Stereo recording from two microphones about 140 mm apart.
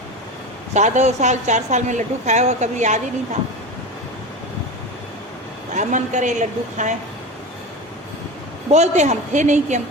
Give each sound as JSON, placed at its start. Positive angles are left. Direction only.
{"t": 0.7, "sound": "a woman's voice", "side_deg": -55}
{"t": 5.7, "sound": "a woman's voice", "side_deg": -60}
{"t": 8.7, "sound": "a woman's voice", "side_deg": -55}